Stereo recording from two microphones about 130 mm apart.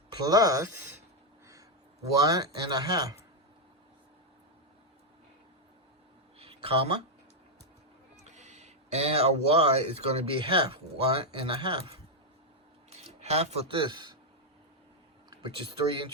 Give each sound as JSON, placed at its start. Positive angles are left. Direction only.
{"t": 0.3, "sound": "speech", "side_deg": -30}
{"t": 2.2, "sound": "speech", "side_deg": -30}
{"t": 6.4, "sound": "a sound", "side_deg": -45}
{"t": 8.2, "sound": "speech", "side_deg": -60}
{"t": 15.3, "sound": "speech", "side_deg": -40}